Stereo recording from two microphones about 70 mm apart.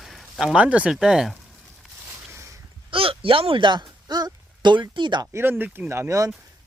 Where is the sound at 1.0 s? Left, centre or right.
Centre.